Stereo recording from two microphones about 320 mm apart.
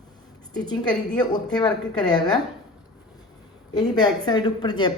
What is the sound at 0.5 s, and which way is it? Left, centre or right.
A woman's voice, centre.